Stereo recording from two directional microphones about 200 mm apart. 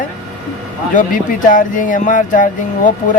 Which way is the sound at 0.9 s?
40° left (ahead or behind).